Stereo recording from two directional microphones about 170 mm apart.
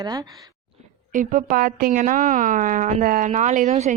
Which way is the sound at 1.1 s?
50° right (ahead or behind).